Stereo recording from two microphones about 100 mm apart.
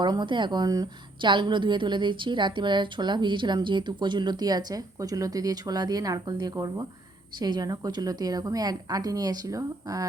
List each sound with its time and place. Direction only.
0.0 s a woman's voice: 45° right (ahead or behind)
1.2 s a woman's voice: 55° right (ahead or behind); by 10.1 s 35° right (ahead or behind)